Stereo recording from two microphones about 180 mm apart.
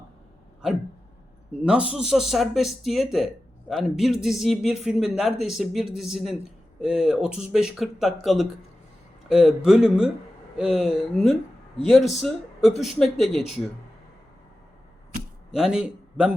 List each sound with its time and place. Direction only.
0.6 s a man's voice: 5° right (ahead or behind)
15.5 s a man's voice: 5° right (ahead or behind)